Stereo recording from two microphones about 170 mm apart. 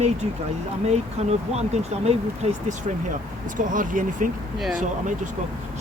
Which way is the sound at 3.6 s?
50° right (ahead or behind).